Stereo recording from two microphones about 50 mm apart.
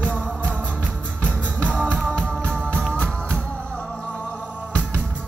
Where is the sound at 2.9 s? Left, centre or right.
Left.